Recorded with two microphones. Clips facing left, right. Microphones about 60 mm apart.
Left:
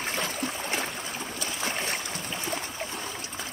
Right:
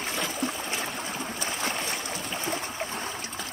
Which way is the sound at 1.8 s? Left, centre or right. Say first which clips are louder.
Even; left.